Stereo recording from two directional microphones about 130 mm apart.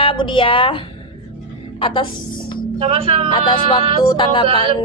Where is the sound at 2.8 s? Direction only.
50° right (ahead or behind).